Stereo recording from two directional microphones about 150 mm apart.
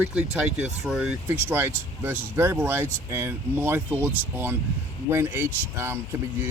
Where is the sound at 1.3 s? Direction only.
15° right (ahead or behind).